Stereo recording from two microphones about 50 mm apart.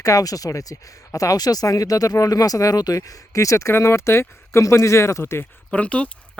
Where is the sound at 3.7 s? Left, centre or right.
Left.